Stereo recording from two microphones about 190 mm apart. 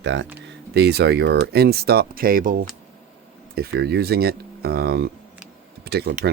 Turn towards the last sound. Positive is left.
turn(degrees=-55)  # may be behind; listen again after turning